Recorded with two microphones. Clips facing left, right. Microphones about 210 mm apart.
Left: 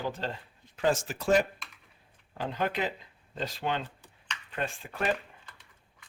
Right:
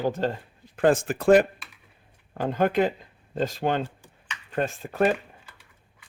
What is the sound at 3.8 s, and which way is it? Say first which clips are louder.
Computer keyboard: right 4 dB; 10° right (ahead or behind).